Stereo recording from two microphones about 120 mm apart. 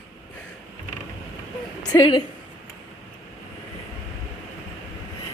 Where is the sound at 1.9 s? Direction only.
35° left (ahead or behind).